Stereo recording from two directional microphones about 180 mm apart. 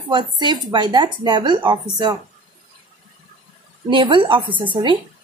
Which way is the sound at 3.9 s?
30° right (ahead or behind).